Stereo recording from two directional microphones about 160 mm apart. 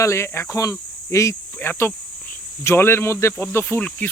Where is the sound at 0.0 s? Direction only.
15° left (ahead or behind).